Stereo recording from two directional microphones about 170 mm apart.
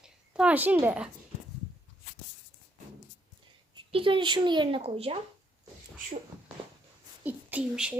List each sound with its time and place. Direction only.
0.0 s a sound: 5° right (ahead or behind)
0.9 s speech: 5° right (ahead or behind)
3.8 s speech: 30° right (ahead or behind)
7.3 s speech: 10° right (ahead or behind)